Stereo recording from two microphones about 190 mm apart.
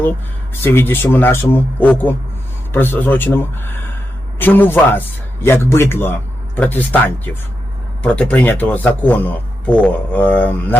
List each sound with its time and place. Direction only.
0.6 s speech: 10° left (ahead or behind)